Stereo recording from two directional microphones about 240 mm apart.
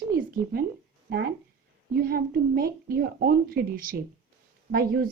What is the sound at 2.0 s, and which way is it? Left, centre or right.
Speech, right.